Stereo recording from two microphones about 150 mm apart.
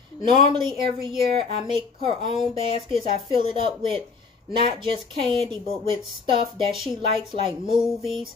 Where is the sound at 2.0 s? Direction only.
35° right (ahead or behind).